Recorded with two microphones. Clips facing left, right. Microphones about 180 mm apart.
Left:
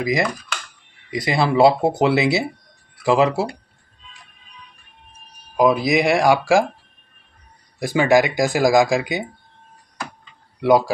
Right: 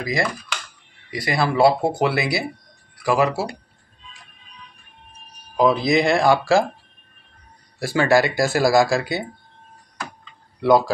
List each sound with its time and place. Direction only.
0.0 s speech: 20° left (ahead or behind)
5.6 s speech: 10° left (ahead or behind)
7.8 s speech: 15° left (ahead or behind)